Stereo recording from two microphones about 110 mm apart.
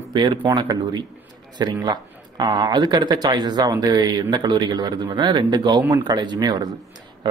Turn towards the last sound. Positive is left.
turn(degrees=-40)  # may be behind; listen again after turning